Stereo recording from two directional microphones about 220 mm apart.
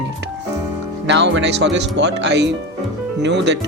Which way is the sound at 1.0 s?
50° right (ahead or behind).